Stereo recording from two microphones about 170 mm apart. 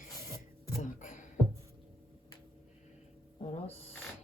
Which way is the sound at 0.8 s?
50° left (ahead or behind).